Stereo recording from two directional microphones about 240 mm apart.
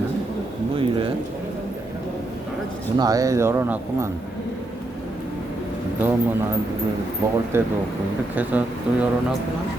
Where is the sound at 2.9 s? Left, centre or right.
Centre.